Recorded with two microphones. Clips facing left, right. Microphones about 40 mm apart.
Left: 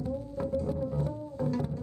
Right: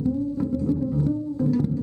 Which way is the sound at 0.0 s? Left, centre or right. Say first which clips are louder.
Right 9 dB; centre.